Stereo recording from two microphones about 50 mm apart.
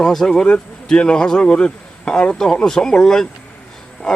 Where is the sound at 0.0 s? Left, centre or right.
Centre.